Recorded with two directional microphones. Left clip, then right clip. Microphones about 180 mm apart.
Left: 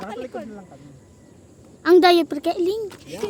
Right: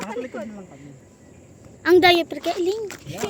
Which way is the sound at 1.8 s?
20° left (ahead or behind).